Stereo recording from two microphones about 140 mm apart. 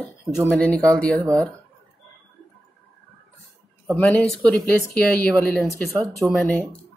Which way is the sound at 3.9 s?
10° left (ahead or behind).